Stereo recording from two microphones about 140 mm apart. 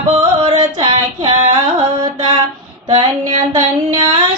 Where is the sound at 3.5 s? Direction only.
30° right (ahead or behind).